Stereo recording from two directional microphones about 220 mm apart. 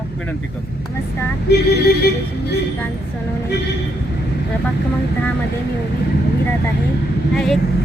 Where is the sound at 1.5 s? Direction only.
45° left (ahead or behind).